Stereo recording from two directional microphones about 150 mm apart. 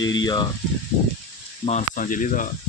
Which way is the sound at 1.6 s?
50° left (ahead or behind).